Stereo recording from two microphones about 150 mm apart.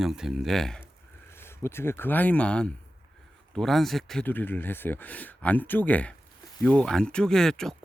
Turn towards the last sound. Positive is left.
turn(degrees=5)  # may be behind; listen again after turning